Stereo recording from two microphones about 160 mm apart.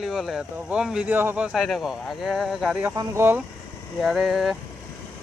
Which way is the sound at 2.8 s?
20° right (ahead or behind).